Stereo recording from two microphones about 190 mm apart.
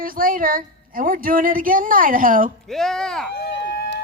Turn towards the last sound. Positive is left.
turn(degrees=65)  # may be behind; listen again after turning